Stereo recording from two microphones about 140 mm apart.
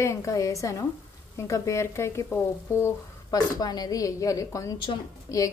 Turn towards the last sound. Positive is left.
turn(degrees=25)  # may be behind; listen again after turning